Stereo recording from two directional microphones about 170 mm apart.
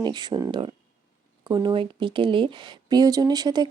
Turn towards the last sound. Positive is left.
turn(degrees=-25)  # may be behind; listen again after turning